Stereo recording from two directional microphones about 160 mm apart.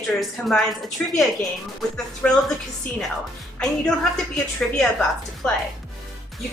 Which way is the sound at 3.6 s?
5° left (ahead or behind).